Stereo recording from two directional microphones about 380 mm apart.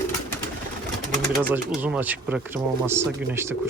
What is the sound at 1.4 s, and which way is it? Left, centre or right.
Speech, centre.